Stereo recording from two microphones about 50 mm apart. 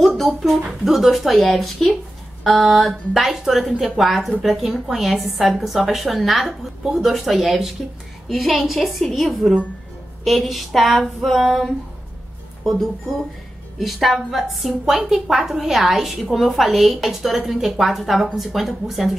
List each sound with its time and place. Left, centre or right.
0.0 s a woman's voice: centre